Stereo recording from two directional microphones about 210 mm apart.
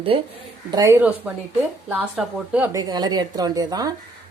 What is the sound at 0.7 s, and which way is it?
A woman's voice, 15° right (ahead or behind).